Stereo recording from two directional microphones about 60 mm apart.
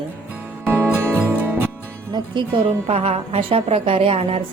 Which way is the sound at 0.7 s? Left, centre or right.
Right.